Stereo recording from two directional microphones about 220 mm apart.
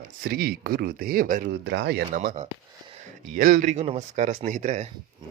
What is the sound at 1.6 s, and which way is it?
Speech, 50° right (ahead or behind).